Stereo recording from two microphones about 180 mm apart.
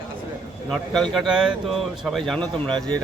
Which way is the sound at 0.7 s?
Centre (ahead or behind).